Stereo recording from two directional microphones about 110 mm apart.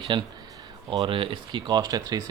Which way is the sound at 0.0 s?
45° right (ahead or behind).